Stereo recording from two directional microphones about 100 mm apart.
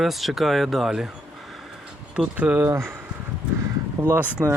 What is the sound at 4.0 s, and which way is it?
Speech, 20° right (ahead or behind).